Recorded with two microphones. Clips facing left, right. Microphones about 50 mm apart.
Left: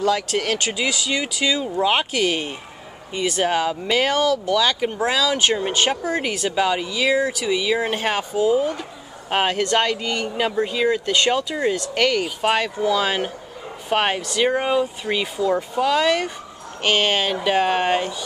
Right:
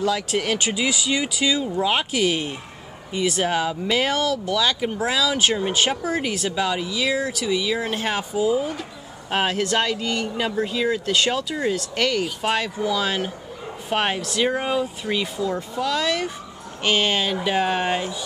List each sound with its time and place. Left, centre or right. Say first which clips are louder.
0.0 s speech: left 2 dB; centre
9.3 s speech: left 2 dB; centre
13.8 s speech: left 2 dB; centre
15.5 s speech: left 8 dB; left
17.2 s speech: left 2 dB; centre